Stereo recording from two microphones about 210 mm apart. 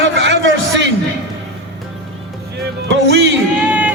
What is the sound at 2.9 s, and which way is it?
Speech, 60° right (ahead or behind).